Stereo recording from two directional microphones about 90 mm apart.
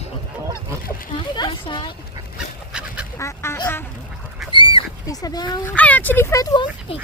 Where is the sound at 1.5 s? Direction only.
65° left (ahead or behind).